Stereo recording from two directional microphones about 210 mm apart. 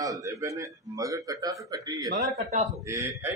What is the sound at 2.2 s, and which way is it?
Speech, 35° right (ahead or behind).